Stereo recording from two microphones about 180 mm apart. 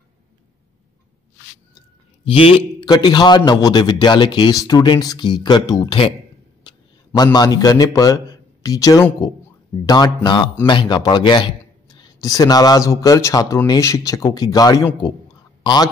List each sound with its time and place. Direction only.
2.2 s a man's voice: 30° left (ahead or behind)
6.7 s a sound: 25° left (ahead or behind)
7.3 s a man's voice: 20° left (ahead or behind)